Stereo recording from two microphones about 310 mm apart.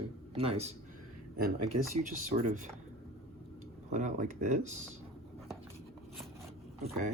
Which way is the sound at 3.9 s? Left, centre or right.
Right.